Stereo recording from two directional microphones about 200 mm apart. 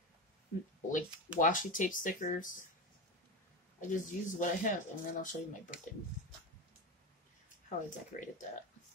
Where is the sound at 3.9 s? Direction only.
40° left (ahead or behind).